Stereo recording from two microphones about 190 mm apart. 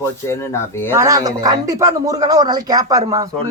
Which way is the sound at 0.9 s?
15° right (ahead or behind).